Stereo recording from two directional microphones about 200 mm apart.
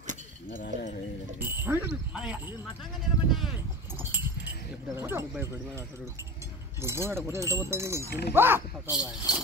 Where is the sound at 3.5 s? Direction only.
10° right (ahead or behind).